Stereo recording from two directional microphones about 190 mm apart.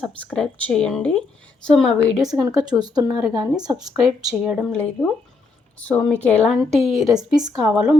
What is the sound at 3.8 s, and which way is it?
A woman's voice, centre (ahead or behind).